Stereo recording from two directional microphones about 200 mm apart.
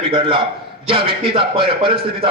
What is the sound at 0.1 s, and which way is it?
A man's voice, 25° right (ahead or behind).